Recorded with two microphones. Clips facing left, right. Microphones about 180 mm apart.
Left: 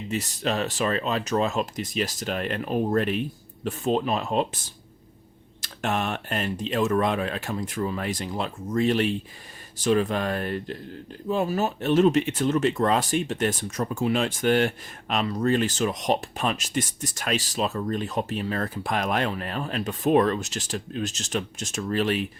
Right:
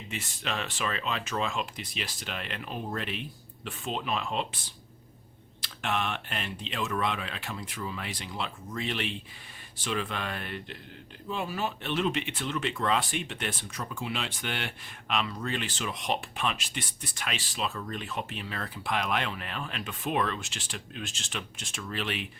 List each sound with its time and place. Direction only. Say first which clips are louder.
0.1 s speech: left 9 dB; 40° left (ahead or behind)